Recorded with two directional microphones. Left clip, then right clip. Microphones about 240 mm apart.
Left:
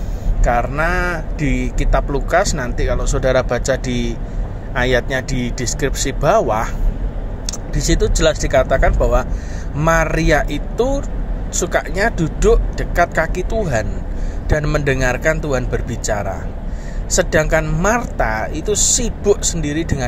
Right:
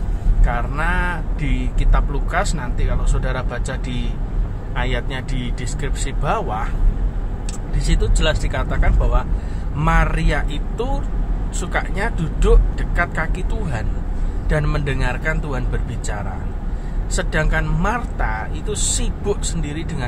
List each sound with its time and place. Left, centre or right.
0.5 s speech: left
7.8 s speech: left
11.5 s speech: left
14.5 s speech: centre